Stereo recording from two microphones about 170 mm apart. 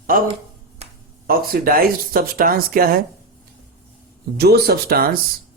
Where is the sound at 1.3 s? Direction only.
60° right (ahead or behind).